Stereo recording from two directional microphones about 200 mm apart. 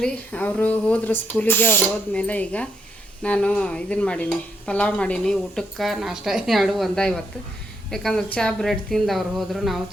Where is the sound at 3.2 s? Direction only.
5° left (ahead or behind).